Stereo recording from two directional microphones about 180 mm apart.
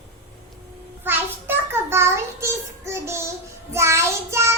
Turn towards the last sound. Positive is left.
turn(degrees=-15)  # may be behind; listen again after turning